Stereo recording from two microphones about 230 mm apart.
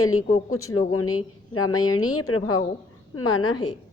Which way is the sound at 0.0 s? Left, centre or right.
Left.